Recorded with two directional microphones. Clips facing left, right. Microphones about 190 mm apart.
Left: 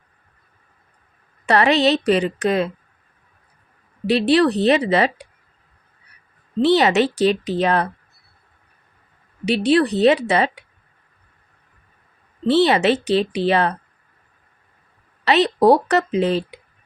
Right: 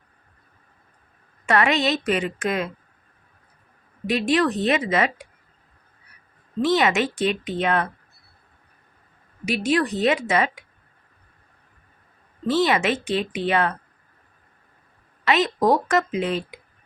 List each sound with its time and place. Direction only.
1.5 s a woman's voice: 35° left (ahead or behind)
4.0 s a woman's voice: 35° left (ahead or behind)
6.6 s a woman's voice: 35° left (ahead or behind)
9.5 s a woman's voice: 35° left (ahead or behind)
12.6 s a woman's voice: 35° left (ahead or behind)
15.2 s a woman's voice: 35° left (ahead or behind)